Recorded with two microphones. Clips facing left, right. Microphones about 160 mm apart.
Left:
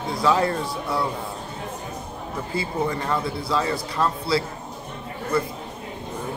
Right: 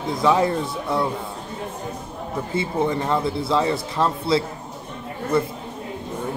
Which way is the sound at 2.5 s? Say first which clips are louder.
Right 3 dB; 25° right (ahead or behind).